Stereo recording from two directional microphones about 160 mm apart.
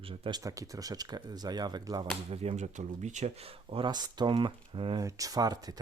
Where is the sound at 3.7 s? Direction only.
30° right (ahead or behind).